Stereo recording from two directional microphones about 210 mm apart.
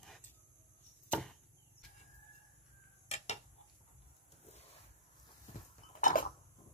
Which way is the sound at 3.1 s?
30° left (ahead or behind).